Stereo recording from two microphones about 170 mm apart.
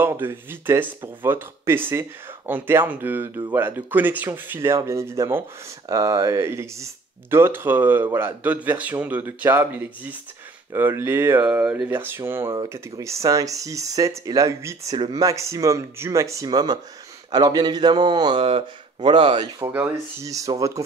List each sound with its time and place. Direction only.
0.0 s speech: 15° right (ahead or behind)
19.6 s speech: 10° right (ahead or behind)